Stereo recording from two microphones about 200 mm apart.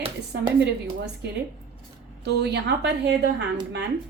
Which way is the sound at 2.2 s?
55° right (ahead or behind).